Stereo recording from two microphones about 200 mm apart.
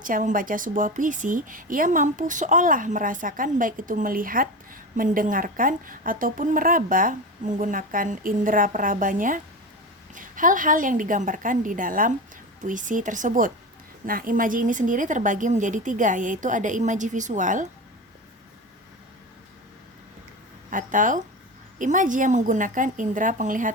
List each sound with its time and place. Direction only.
0.0 s a woman's voice: 40° right (ahead or behind)
20.7 s speech: 40° right (ahead or behind)